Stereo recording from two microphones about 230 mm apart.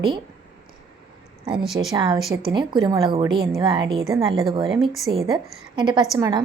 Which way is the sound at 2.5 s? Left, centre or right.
Centre.